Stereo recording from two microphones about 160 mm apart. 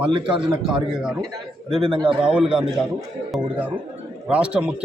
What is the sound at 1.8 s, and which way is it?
Speech, 30° right (ahead or behind).